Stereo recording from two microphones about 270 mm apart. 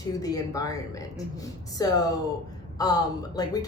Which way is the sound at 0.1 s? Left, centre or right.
Centre.